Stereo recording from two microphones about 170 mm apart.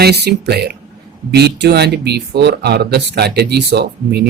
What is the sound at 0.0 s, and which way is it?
Speech, 70° right (ahead or behind).